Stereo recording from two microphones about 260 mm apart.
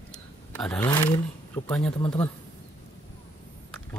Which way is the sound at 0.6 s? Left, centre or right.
Centre.